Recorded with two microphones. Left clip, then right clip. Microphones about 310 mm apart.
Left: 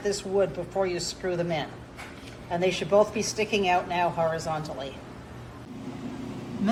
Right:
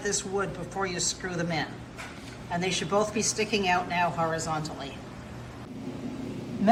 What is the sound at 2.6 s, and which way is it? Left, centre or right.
A woman's voice, centre.